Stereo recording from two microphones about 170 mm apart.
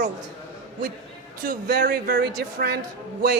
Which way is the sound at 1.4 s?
75° right (ahead or behind).